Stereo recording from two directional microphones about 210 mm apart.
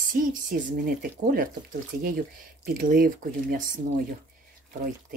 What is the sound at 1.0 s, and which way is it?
Speech, 40° right (ahead or behind).